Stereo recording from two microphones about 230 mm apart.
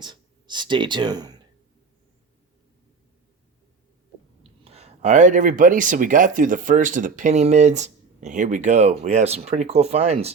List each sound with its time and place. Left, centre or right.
0.0 s speech: centre
4.6 s speech: right